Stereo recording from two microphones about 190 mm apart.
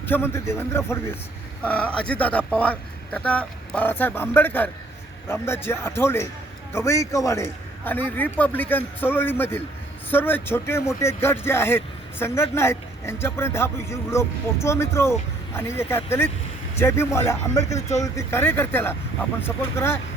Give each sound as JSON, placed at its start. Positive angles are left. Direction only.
{"t": 0.0, "sound": "a man's voice", "side_deg": 10}